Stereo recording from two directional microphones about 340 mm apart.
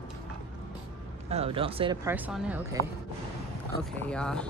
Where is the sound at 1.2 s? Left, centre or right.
Centre.